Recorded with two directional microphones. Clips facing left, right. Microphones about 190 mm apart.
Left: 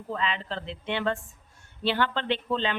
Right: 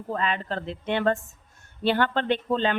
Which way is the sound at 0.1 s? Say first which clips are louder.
Right 3 dB; 50° right (ahead or behind).